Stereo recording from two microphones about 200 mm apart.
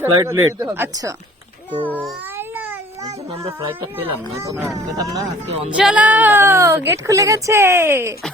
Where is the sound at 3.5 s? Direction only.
15° right (ahead or behind).